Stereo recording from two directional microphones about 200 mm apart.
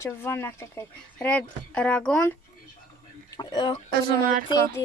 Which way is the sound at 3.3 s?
20° left (ahead or behind).